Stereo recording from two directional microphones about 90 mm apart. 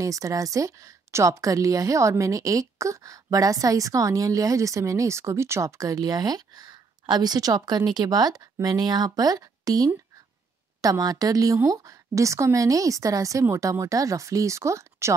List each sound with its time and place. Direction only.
0.0 s a woman's voice: 40° right (ahead or behind)